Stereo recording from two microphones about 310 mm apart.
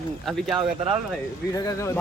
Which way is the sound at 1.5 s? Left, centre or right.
Centre.